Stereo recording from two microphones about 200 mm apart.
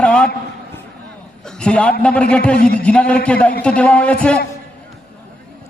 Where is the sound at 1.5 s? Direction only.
5° left (ahead or behind).